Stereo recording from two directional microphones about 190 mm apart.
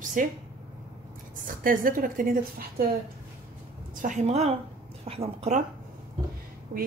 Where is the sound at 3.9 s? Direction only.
40° right (ahead or behind).